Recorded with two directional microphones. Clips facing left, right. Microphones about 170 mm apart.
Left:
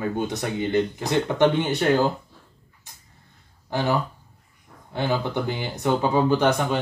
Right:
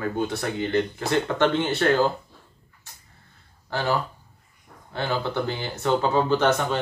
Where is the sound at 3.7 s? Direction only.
15° left (ahead or behind).